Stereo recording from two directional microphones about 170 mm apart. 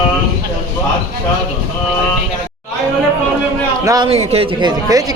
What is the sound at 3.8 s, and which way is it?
Speech, 20° right (ahead or behind).